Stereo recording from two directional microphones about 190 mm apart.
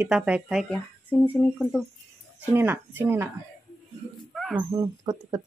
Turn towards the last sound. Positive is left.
turn(degrees=-20)  # may be behind; listen again after turning